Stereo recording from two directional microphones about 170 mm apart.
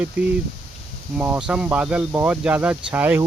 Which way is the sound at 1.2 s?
5° right (ahead or behind).